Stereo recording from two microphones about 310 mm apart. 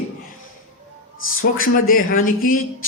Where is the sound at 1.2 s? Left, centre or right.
Left.